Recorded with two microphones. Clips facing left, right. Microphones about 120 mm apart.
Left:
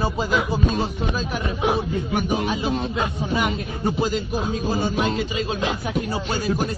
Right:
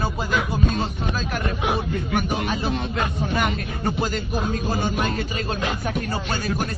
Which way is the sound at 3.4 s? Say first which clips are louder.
Left 1 dB; 10° left (ahead or behind).